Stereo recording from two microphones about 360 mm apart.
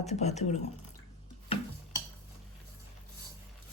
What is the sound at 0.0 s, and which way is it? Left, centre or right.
Speech, centre.